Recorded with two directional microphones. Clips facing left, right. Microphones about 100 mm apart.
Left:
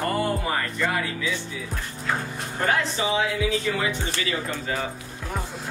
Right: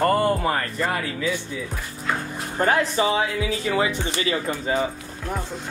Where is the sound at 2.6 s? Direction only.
40° right (ahead or behind).